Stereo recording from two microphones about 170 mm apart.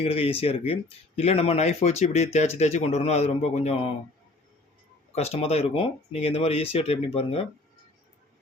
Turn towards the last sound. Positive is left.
turn(degrees=35)  # may be behind; listen again after turning